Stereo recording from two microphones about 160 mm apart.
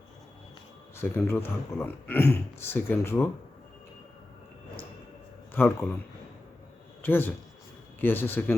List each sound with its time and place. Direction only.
0.9 s speech: 15° left (ahead or behind)
5.5 s speech: 15° left (ahead or behind)
7.0 s a man's voice: 15° left (ahead or behind)